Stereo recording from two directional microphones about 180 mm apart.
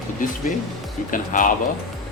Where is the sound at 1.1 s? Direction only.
45° left (ahead or behind).